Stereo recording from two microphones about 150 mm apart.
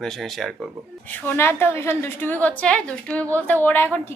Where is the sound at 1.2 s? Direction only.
15° left (ahead or behind).